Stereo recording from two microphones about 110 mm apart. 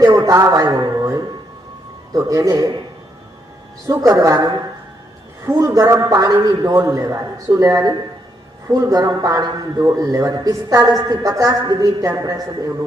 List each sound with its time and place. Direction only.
0.0 s a sound: 30° right (ahead or behind)
2.1 s a woman's voice: 30° right (ahead or behind)
3.8 s a woman's voice: 30° right (ahead or behind)